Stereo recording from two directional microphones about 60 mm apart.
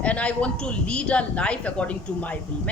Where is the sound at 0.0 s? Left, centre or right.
Left.